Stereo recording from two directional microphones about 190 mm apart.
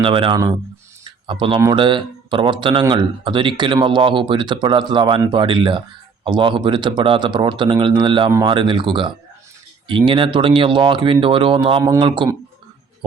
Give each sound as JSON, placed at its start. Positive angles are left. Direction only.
{"t": 0.0, "sound": "speech", "side_deg": -25}